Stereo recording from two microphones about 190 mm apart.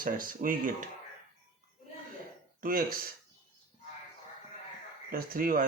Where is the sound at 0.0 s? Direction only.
45° right (ahead or behind).